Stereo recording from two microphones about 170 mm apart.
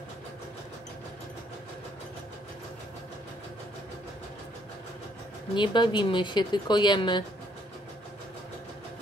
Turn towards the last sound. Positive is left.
turn(degrees=25)  # may be behind; listen again after turning